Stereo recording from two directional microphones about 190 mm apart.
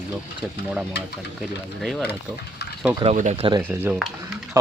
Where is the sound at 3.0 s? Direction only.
40° right (ahead or behind).